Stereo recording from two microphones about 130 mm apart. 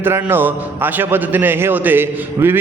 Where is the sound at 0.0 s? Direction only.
15° right (ahead or behind).